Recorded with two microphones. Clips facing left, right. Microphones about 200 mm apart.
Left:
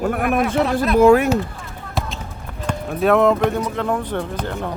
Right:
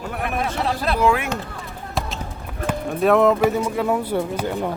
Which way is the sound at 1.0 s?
40° left (ahead or behind).